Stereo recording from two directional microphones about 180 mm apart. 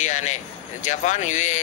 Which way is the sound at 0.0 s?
40° left (ahead or behind).